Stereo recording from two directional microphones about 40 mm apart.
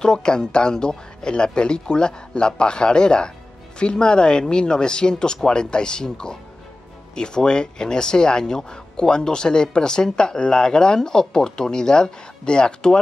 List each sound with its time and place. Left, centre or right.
0.0 s speech: centre